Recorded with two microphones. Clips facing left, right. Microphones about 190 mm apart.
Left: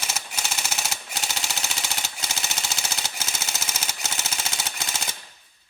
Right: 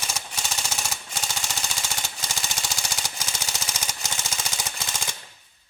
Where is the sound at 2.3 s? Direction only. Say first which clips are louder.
Even; 5° left (ahead or behind).